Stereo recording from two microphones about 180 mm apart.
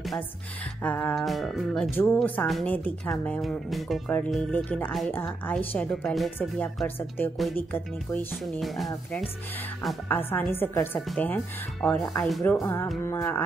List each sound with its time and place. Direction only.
0.8 s a woman's voice: 10° left (ahead or behind)
8.3 s a woman's voice: centre (ahead or behind)
12.3 s speech: centre (ahead or behind)
12.5 s a woman's voice: 15° left (ahead or behind)